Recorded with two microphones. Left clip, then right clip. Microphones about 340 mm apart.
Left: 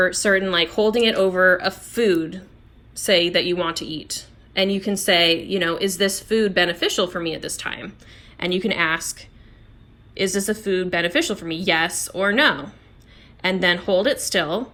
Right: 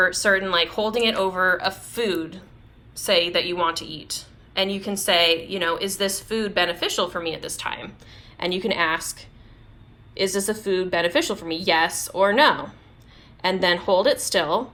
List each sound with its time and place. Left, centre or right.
0.0 s a woman's voice: centre